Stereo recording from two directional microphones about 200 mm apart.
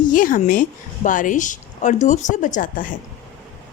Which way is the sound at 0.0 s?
40° left (ahead or behind).